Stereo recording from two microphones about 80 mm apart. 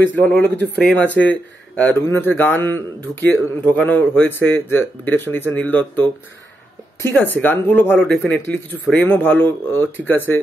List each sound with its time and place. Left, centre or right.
0.1 s a man's voice: centre